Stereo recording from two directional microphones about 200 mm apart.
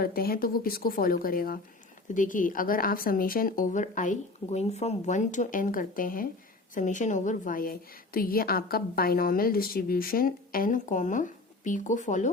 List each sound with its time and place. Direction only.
0.0 s a woman's voice: 50° left (ahead or behind)